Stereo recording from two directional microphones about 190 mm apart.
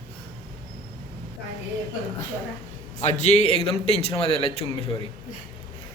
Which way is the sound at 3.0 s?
35° left (ahead or behind).